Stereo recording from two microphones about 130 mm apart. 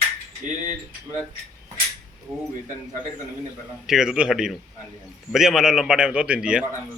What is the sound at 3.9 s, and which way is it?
A man's voice, 5° right (ahead or behind).